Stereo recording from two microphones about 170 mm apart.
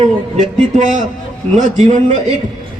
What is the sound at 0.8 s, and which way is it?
A man's voice, 45° right (ahead or behind).